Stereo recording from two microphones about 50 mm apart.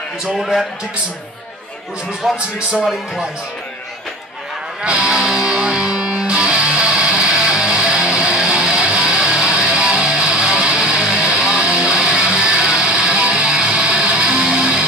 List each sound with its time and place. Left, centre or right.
0.4 s a man's voice: centre
2.2 s a man's voice: centre
4.8 s music: centre